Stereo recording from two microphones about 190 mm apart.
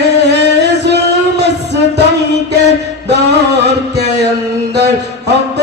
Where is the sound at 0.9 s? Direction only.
60° right (ahead or behind).